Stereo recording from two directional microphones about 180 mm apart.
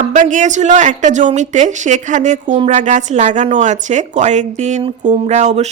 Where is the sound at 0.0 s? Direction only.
45° right (ahead or behind).